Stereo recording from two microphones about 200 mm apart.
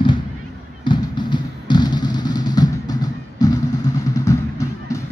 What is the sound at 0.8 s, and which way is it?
Music, 20° left (ahead or behind).